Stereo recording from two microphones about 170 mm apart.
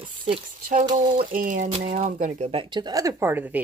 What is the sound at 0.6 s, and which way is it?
Speech, 50° right (ahead or behind).